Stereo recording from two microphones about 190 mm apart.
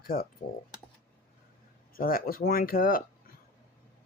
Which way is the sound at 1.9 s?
50° left (ahead or behind).